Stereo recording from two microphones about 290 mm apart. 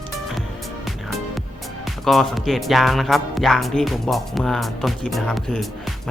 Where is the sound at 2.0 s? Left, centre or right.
Centre.